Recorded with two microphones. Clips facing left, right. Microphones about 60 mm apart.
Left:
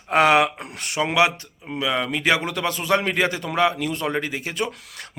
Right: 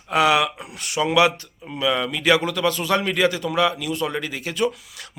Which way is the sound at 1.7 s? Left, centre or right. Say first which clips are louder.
Right 1 dB; centre.